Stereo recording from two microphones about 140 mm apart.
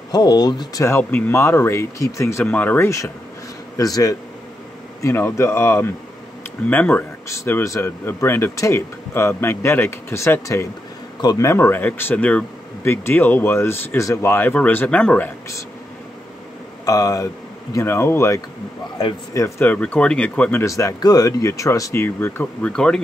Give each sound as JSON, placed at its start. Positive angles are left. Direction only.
{"t": 0.1, "sound": "speech", "side_deg": 30}
{"t": 0.8, "sound": "speech", "side_deg": 20}
{"t": 16.8, "sound": "speech", "side_deg": 25}
{"t": 19.7, "sound": "speech", "side_deg": 5}
{"t": 20.6, "sound": "speech", "side_deg": 25}